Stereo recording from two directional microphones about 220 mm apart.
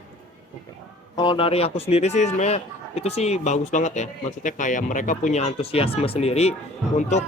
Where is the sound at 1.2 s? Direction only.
20° left (ahead or behind).